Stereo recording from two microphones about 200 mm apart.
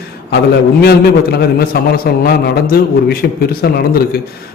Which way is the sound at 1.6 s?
50° left (ahead or behind).